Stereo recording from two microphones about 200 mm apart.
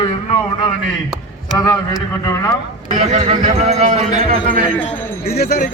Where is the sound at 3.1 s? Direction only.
35° right (ahead or behind).